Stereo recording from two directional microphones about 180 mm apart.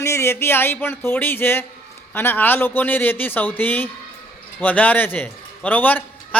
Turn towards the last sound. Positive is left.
turn(degrees=10)  # may be behind; listen again after turning